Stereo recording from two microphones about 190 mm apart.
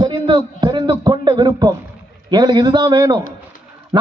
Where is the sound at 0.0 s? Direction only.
25° right (ahead or behind).